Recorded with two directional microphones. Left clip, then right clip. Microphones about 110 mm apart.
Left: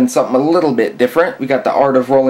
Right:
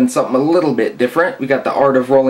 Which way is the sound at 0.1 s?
40° left (ahead or behind).